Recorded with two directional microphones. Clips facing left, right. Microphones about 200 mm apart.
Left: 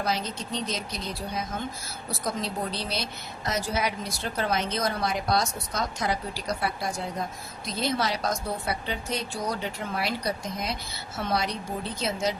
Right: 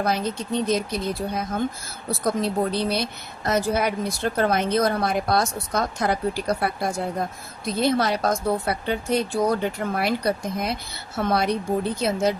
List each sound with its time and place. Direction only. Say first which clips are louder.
0.0 s a woman's voice: right 5 dB; 55° right (ahead or behind)